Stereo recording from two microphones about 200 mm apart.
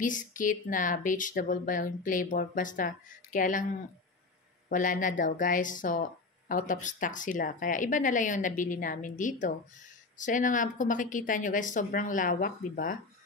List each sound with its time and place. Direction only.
0.0 s speech: 40° left (ahead or behind)
4.6 s speech: 40° left (ahead or behind)